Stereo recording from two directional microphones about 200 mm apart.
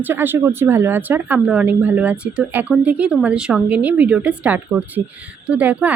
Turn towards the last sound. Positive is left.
turn(degrees=-10)  # may be behind; listen again after turning